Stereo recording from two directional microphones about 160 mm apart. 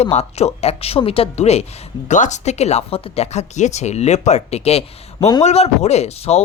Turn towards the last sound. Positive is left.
turn(degrees=40)  # may be behind; listen again after turning